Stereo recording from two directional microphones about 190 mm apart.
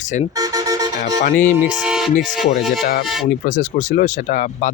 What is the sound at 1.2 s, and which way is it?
Speech, 45° left (ahead or behind).